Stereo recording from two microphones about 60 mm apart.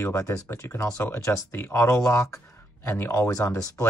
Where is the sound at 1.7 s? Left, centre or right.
Left.